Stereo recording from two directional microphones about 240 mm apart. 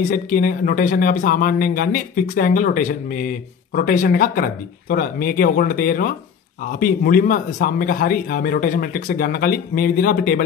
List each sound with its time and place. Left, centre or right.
0.1 s speech: left